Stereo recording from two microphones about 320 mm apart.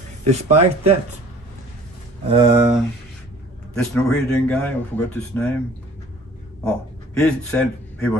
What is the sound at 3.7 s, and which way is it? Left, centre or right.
Speech, centre.